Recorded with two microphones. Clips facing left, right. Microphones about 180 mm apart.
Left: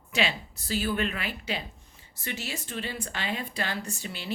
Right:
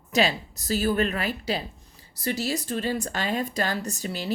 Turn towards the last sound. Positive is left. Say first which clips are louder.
# right 6 dB
turn(degrees=-40)  # may be behind; listen again after turning